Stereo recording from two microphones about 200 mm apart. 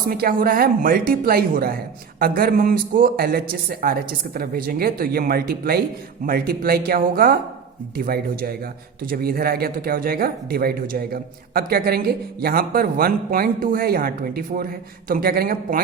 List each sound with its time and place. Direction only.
0.1 s speech: 45° right (ahead or behind)